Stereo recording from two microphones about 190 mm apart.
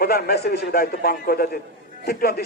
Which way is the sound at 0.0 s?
55° left (ahead or behind).